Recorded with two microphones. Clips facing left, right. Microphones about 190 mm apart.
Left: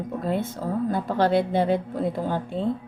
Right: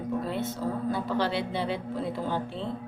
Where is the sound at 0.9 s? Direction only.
50° left (ahead or behind).